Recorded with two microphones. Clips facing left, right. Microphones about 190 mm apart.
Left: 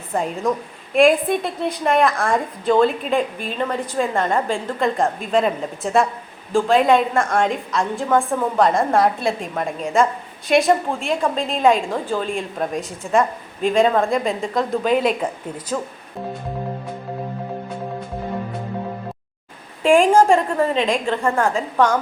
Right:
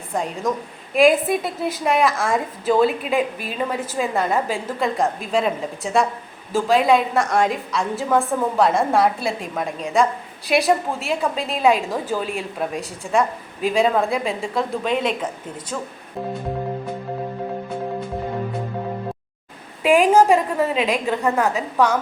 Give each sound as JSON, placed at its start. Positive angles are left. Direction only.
{"t": 0.1, "sound": "a woman's voice", "side_deg": 0}
{"t": 19.8, "sound": "a woman's voice", "side_deg": -5}